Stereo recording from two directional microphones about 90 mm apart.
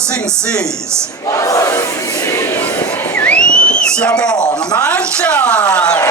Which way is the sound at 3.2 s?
15° left (ahead or behind).